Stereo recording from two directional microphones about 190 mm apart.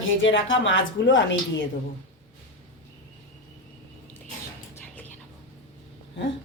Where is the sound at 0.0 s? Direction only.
90° left.